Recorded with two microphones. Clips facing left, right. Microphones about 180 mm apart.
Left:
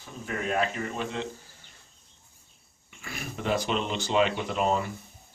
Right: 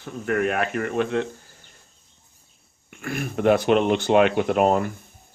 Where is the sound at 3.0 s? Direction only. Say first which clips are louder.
Right 12 dB; 55° right (ahead or behind).